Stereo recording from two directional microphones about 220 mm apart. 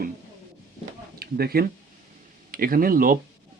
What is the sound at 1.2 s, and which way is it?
Speech, 45° right (ahead or behind).